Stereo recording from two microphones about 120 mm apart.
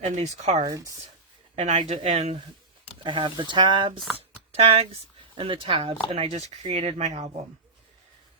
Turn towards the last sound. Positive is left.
turn(degrees=-65)  # may be behind; listen again after turning